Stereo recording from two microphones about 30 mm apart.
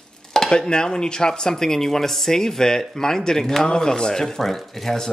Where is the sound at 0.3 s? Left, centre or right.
Left.